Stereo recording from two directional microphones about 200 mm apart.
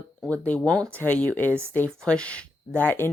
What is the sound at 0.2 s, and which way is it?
Speech, 5° left (ahead or behind).